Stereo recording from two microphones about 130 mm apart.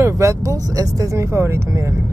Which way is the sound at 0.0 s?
25° right (ahead or behind).